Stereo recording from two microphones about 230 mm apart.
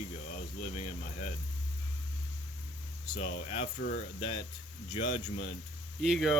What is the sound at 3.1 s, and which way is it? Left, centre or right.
Speech, left.